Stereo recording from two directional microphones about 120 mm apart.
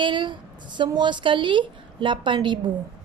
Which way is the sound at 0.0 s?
40° right (ahead or behind).